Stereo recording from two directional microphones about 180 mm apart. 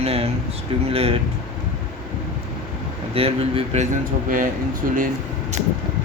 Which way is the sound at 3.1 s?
30° right (ahead or behind).